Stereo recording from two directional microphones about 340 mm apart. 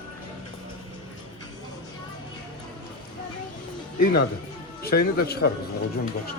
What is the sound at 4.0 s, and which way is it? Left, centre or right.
Speech, left.